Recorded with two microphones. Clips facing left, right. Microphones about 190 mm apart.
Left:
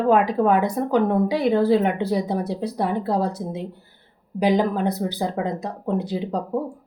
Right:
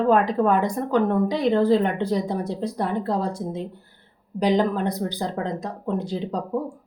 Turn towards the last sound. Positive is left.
turn(degrees=10)  # may be behind; listen again after turning